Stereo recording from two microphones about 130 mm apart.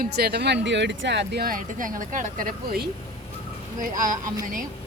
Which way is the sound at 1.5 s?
90° right.